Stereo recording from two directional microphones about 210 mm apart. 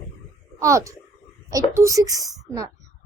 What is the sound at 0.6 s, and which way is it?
A child's voice, 15° right (ahead or behind).